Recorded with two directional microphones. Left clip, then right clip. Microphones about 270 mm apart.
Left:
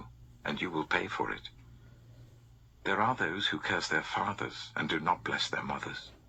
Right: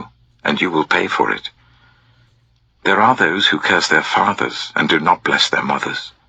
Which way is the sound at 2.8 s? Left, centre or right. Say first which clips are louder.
Right 17 dB; right.